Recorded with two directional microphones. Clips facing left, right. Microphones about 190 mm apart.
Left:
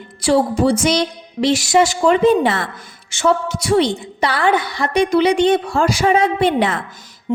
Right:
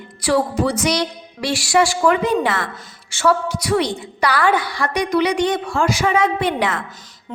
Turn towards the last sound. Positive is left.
turn(degrees=15)  # may be behind; listen again after turning